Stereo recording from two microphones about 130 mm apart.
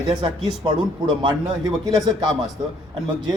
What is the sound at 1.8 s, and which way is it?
Speech, 30° right (ahead or behind).